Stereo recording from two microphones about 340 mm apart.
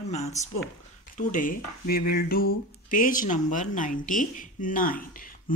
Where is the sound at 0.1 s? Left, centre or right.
Centre.